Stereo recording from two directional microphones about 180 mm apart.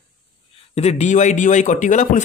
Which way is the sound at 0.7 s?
35° left (ahead or behind).